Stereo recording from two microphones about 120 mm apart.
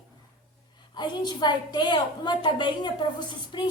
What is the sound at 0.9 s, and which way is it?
A woman's voice, 40° left (ahead or behind).